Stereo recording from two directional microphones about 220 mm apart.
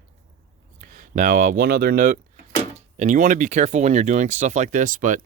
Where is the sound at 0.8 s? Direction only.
40° right (ahead or behind).